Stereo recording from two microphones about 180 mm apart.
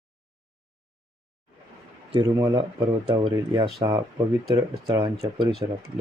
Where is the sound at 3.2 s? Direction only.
25° right (ahead or behind).